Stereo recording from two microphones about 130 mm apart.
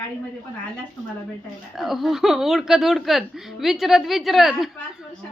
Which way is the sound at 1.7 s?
Centre (ahead or behind).